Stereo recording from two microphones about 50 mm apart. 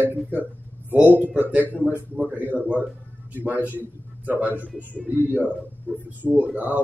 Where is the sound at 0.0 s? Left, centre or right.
Right.